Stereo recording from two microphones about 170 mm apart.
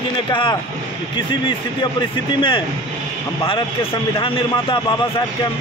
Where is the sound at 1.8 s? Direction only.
30° left (ahead or behind).